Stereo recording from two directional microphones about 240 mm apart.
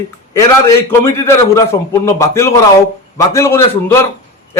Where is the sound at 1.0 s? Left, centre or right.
Centre.